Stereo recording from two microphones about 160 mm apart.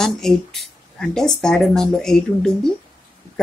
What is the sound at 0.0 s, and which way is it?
A woman's voice, centre (ahead or behind).